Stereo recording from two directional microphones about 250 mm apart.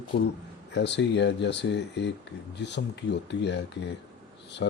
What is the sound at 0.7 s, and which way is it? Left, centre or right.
Speech, left.